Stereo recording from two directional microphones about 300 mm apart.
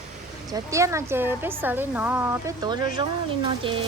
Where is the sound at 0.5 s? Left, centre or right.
Centre.